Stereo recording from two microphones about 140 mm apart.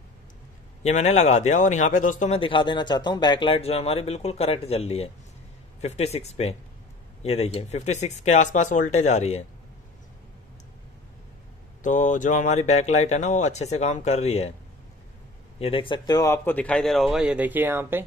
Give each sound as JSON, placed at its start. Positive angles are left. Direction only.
{"t": 0.8, "sound": "speech", "side_deg": 55}
{"t": 2.3, "sound": "speech", "side_deg": 35}
{"t": 11.8, "sound": "speech", "side_deg": 60}
{"t": 15.6, "sound": "speech", "side_deg": 40}
{"t": 16.4, "sound": "speech", "side_deg": 10}